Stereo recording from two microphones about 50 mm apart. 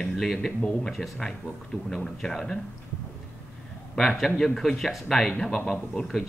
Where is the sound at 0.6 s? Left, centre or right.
Centre.